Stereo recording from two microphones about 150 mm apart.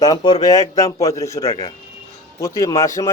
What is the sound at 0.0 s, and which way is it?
Speech, 25° left (ahead or behind).